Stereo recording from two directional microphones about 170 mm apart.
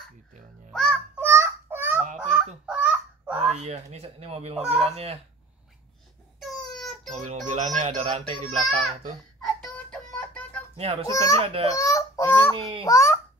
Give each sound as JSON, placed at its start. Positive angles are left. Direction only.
{"t": 0.7, "sound": "a sound", "side_deg": 0}
{"t": 1.2, "sound": "child singing", "side_deg": -15}
{"t": 2.1, "sound": "goose", "side_deg": -5}
{"t": 3.5, "sound": "speech", "side_deg": -40}
{"t": 6.4, "sound": "a sound", "side_deg": 0}
{"t": 7.1, "sound": "speech", "side_deg": -45}
{"t": 10.1, "sound": "music", "side_deg": 10}
{"t": 10.8, "sound": "speech", "side_deg": -35}
{"t": 11.1, "sound": "a child's voice", "side_deg": 20}
{"t": 11.4, "sound": "speech", "side_deg": -35}
{"t": 11.7, "sound": "a child's voice", "side_deg": 20}